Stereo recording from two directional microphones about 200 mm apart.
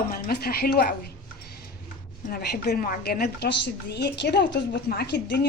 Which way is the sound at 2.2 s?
50° left (ahead or behind).